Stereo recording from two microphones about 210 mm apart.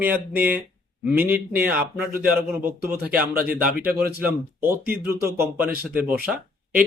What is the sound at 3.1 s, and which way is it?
Speech, 45° right (ahead or behind).